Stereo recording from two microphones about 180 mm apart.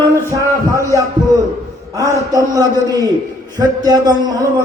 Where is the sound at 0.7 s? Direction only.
15° right (ahead or behind).